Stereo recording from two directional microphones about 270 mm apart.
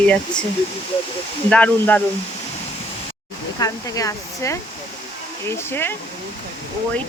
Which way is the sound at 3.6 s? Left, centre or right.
Centre.